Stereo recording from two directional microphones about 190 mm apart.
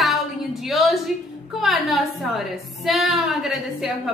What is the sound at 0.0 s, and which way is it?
A woman's voice, centre (ahead or behind).